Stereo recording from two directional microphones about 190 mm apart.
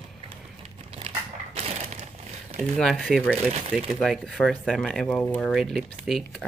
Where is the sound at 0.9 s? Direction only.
30° right (ahead or behind).